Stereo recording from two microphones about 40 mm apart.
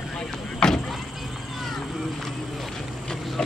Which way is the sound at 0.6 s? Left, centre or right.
Left.